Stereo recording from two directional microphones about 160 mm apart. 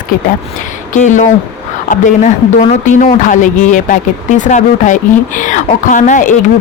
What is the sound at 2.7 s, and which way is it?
Speech, 50° left (ahead or behind).